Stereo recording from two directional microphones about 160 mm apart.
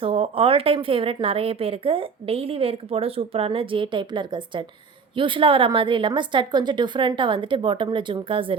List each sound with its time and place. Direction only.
0.0 s speech: 35° right (ahead or behind)